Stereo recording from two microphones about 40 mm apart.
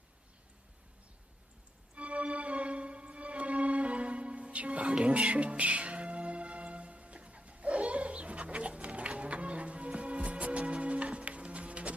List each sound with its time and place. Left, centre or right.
2.0 s music: right